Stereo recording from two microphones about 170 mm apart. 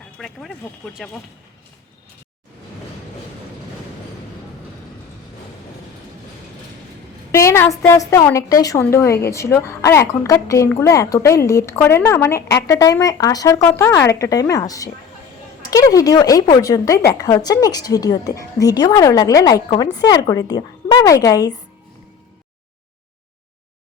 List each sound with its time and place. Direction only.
0.2 s speech: 5° left (ahead or behind)
7.3 s a woman's voice: 15° left (ahead or behind)